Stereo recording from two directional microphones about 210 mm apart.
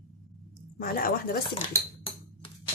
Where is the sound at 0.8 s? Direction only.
45° left (ahead or behind).